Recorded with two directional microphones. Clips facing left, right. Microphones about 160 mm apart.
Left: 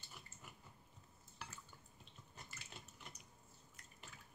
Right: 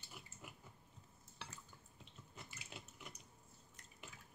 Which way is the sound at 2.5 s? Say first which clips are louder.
Right 2 dB; 10° right (ahead or behind).